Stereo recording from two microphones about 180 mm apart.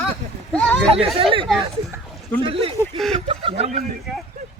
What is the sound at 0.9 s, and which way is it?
Speech, 30° right (ahead or behind).